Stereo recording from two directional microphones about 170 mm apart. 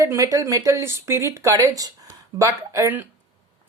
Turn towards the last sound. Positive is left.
turn(degrees=-15)  # may be behind; listen again after turning